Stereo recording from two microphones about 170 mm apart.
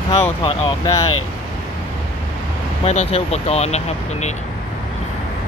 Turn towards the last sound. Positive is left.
turn(degrees=40)  # may be behind; listen again after turning